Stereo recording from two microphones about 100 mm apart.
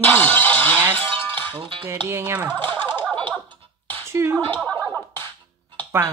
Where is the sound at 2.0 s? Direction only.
25° right (ahead or behind).